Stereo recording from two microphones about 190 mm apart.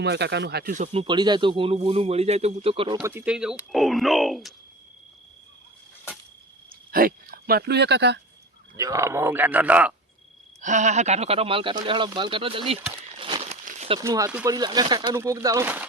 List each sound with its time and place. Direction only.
0.0 s speech: 65° right (ahead or behind)
0.7 s speech: 40° right (ahead or behind)
1.0 s a man's voice: 25° right (ahead or behind)
3.0 s speech: 10° right (ahead or behind)
6.7 s speech: 50° right (ahead or behind)
8.7 s speech: 15° right (ahead or behind)
10.6 s speech: 40° right (ahead or behind)
14.0 s speech: 15° right (ahead or behind)